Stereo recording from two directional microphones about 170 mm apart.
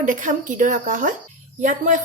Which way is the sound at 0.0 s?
50° right (ahead or behind).